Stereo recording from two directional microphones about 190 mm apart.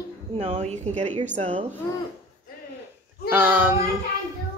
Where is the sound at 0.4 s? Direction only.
35° right (ahead or behind).